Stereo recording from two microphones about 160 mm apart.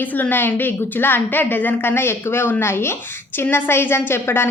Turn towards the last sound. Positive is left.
turn(degrees=15)  # may be behind; listen again after turning